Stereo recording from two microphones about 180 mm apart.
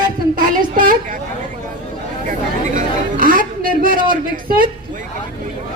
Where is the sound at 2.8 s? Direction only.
50° right (ahead or behind).